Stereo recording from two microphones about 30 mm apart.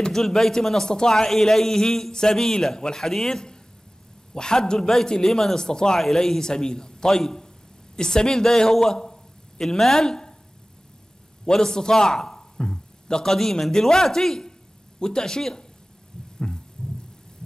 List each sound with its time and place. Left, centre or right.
0.1 s a man's voice: centre
4.7 s a man's voice: centre
5.9 s a man's voice: centre
7.9 s a man's voice: left
11.4 s a man's voice: left
16.3 s heart sounds: left